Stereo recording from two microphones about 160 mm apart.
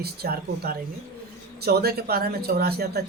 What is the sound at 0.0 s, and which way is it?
Speech, 75° right (ahead or behind).